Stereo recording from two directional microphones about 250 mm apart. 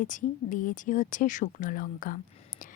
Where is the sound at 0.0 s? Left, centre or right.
Left.